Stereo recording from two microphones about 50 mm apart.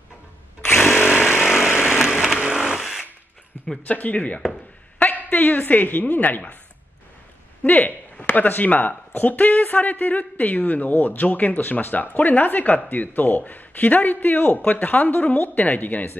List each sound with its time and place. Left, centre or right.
0.7 s power tool: left
1.4 s chainsaw: centre
1.9 s a sound: centre
3.8 s a man's voice: left
7.6 s a sound: left
8.5 s a man's voice: left